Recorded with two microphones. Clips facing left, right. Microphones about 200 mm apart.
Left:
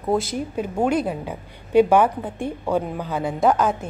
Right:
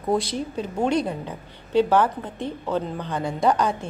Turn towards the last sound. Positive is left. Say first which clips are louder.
# left 2 dB
turn(degrees=5)  # may be behind; listen again after turning